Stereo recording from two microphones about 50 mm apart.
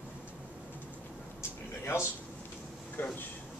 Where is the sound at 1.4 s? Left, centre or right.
Left.